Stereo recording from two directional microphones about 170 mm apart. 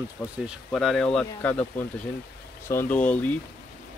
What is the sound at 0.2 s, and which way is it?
Speech, 15° left (ahead or behind).